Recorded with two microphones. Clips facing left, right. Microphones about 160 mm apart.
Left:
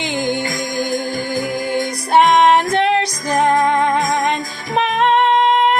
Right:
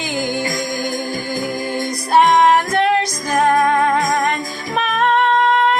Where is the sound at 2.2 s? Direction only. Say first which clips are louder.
Left 1 dB; 20° left (ahead or behind).